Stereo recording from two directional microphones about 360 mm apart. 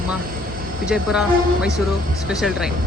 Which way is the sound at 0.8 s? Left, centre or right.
Centre.